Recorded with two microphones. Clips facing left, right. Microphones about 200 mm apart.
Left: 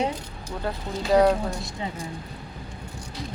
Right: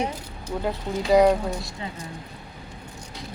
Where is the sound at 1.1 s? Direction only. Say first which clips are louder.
Right 1 dB; 10° right (ahead or behind).